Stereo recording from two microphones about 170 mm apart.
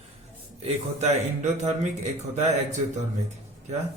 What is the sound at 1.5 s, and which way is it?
Speech, 40° right (ahead or behind).